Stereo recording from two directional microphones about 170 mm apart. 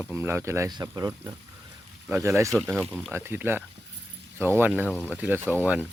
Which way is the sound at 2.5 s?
Centre (ahead or behind).